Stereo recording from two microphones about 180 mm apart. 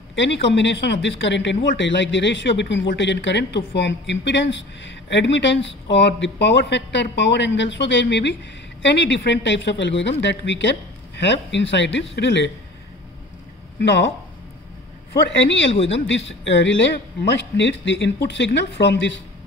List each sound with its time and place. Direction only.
0.1 s a man's voice: 90° left
15.2 s a man's voice: 80° left
15.7 s speech: 35° left (ahead or behind)
16.1 s a man's voice: 90° left